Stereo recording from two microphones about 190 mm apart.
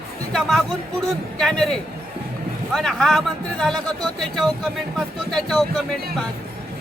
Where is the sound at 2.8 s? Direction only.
Centre (ahead or behind).